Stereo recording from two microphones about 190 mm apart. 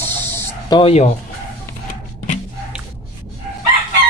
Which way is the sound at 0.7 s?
30° left (ahead or behind).